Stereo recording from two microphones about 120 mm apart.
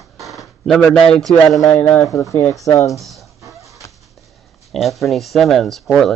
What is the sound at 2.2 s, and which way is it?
Speech, 25° left (ahead or behind).